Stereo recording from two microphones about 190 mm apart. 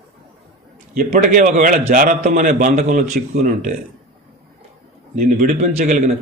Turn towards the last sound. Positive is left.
turn(degrees=-40)  # may be behind; listen again after turning